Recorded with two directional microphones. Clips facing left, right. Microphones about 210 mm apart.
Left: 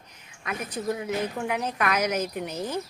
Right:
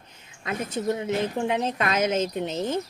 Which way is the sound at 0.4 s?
25° right (ahead or behind).